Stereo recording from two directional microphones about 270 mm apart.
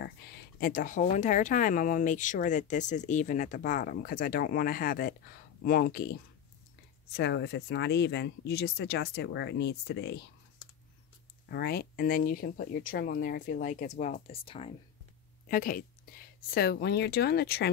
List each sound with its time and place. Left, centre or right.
0.6 s speech: left
7.2 s speech: left
11.5 s speech: left
15.4 s speech: left